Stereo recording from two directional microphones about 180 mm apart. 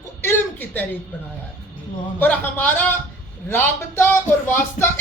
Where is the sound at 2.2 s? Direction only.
10° left (ahead or behind).